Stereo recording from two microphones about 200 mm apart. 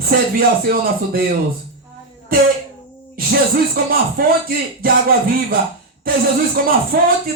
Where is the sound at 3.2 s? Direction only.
45° right (ahead or behind).